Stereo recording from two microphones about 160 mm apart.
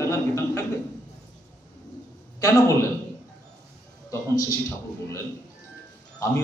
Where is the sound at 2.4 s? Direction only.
20° left (ahead or behind).